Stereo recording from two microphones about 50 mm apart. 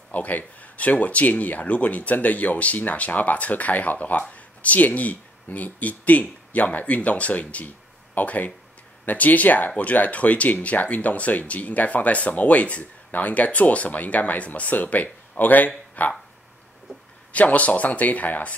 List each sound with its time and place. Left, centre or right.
0.1 s speech: left
17.3 s speech: left